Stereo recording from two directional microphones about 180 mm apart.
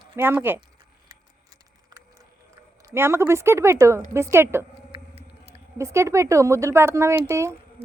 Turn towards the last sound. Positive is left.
turn(degrees=-15)  # may be behind; listen again after turning